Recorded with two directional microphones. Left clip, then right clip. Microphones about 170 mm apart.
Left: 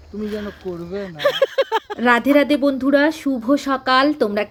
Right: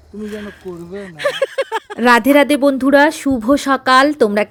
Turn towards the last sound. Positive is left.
turn(degrees=-45)  # may be behind; listen again after turning